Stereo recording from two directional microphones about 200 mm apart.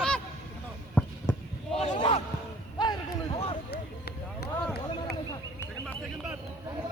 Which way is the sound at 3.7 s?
55° left (ahead or behind).